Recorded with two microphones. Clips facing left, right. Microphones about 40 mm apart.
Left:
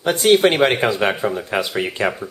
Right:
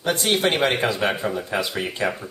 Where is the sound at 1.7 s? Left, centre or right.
Left.